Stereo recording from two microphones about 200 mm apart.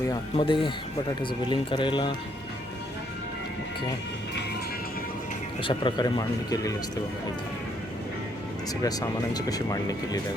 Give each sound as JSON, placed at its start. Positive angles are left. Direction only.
{"t": 0.1, "sound": "speech", "side_deg": 25}
{"t": 5.6, "sound": "speech", "side_deg": 25}
{"t": 8.8, "sound": "speech", "side_deg": 20}